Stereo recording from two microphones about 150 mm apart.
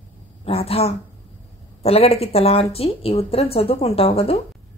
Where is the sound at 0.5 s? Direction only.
40° left (ahead or behind).